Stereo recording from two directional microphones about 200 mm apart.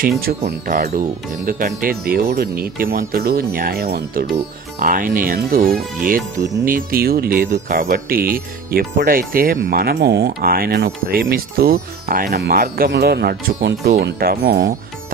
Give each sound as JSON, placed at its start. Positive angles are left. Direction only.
{"t": 0.4, "sound": "speech", "side_deg": -40}